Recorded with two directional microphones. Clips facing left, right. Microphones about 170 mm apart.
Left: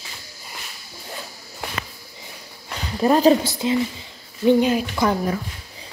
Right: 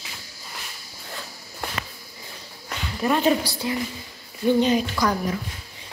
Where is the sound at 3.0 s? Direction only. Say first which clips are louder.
Left 5 dB; 35° left (ahead or behind).